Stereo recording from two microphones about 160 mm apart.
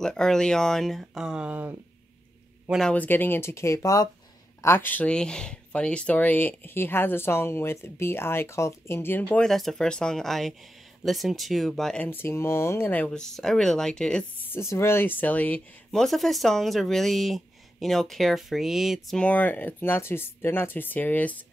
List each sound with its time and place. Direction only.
0.0 s speech: 5° left (ahead or behind)
2.8 s speech: 10° left (ahead or behind)